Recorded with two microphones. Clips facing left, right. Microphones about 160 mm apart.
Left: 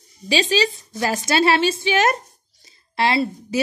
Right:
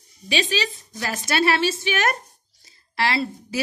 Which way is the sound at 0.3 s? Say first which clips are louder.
Left 5 dB; 35° left (ahead or behind).